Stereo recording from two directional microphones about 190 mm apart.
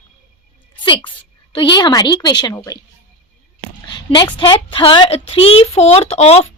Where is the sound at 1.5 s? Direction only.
25° left (ahead or behind).